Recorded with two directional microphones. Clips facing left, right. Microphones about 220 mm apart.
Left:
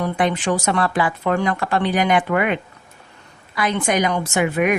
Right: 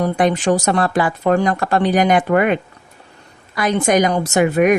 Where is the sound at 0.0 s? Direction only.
40° right (ahead or behind).